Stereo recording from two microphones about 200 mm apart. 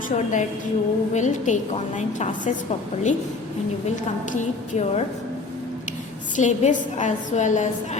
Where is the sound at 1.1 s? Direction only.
35° left (ahead or behind).